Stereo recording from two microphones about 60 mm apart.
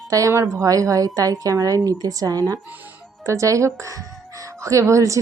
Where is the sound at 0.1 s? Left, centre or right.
Right.